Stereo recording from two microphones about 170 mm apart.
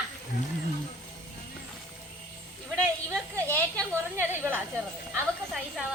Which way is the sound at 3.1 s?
15° right (ahead or behind).